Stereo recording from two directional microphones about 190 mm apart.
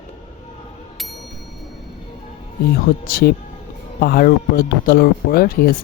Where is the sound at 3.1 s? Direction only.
55° left (ahead or behind).